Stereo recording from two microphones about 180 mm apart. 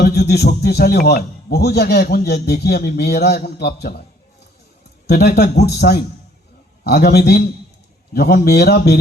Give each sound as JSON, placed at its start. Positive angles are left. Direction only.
{"t": 0.0, "sound": "a man's voice", "side_deg": 60}
{"t": 5.0, "sound": "a man's voice", "side_deg": 65}